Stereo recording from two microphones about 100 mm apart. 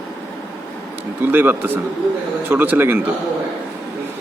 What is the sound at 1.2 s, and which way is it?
A man's voice, 20° right (ahead or behind).